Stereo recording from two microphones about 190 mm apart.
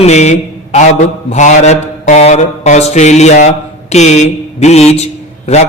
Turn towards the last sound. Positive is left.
turn(degrees=35)  # may be behind; listen again after turning